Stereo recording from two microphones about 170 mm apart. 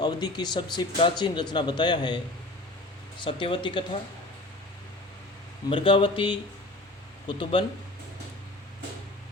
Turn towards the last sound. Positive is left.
turn(degrees=30)  # may be behind; listen again after turning